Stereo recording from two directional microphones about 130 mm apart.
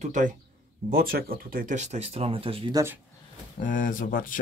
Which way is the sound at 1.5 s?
80° right.